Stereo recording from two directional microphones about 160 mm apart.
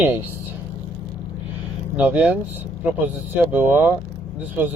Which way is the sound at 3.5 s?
10° right (ahead or behind).